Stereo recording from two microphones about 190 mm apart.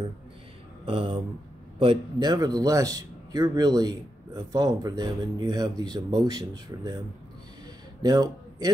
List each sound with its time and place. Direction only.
0.8 s a man's voice: 25° right (ahead or behind)
8.0 s a man's voice: 20° right (ahead or behind)